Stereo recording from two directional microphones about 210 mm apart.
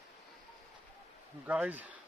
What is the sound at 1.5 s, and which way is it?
Speech, 5° right (ahead or behind).